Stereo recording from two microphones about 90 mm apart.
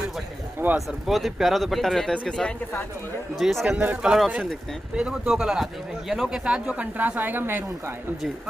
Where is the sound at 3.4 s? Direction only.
Centre (ahead or behind).